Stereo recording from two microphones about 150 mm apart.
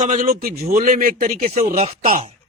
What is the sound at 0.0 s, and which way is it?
A man's voice, 60° right (ahead or behind).